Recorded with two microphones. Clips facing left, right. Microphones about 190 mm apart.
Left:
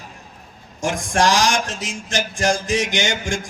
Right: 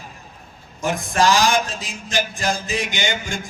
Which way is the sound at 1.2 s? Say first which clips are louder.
Right 1 dB; 90° left.